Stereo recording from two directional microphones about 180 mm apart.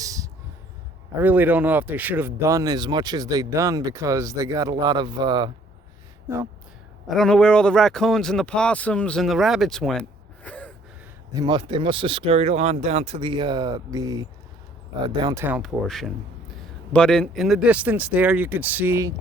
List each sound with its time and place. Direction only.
0.0 s a sound: 20° right (ahead or behind)
1.2 s speech: 10° right (ahead or behind); by 5.5 s 25° right (ahead or behind)
7.1 s speech: 5° left (ahead or behind)
11.3 s speech: 25° right (ahead or behind)
15.4 s speech: 5° right (ahead or behind)